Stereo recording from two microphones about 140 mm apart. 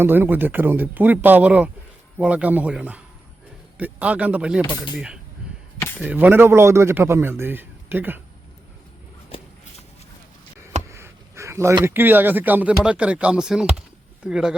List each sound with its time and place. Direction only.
0.0 s a man's voice: 15° right (ahead or behind)
10.8 s a sound: 20° right (ahead or behind)
11.9 s a man's voice: 15° right (ahead or behind)